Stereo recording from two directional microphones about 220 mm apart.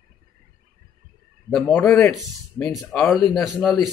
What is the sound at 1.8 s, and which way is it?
Speech, 15° left (ahead or behind).